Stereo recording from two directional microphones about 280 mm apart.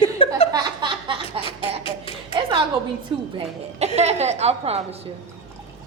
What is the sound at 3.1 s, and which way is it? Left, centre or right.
A woman's voice, centre.